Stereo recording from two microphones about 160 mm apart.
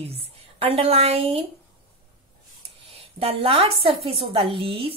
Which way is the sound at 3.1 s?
40° right (ahead or behind).